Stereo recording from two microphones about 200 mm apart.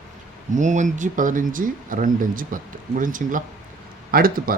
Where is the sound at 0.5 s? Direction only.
40° right (ahead or behind).